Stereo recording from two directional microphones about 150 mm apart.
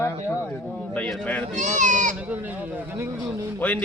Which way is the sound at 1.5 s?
55° right (ahead or behind).